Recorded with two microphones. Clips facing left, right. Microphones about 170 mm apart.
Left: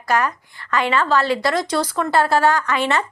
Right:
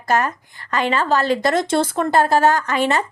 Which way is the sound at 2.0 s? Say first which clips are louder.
Right 1 dB; 45° right (ahead or behind).